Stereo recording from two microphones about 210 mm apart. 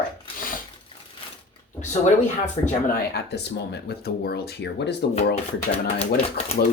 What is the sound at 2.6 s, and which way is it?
Speech, 35° left (ahead or behind).